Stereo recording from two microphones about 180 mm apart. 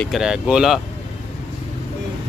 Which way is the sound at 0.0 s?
Centre (ahead or behind).